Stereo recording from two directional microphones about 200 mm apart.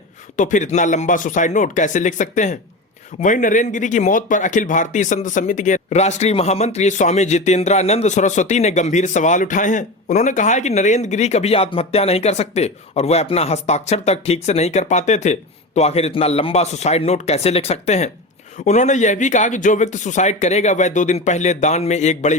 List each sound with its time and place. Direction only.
0.3 s speech: 40° left (ahead or behind)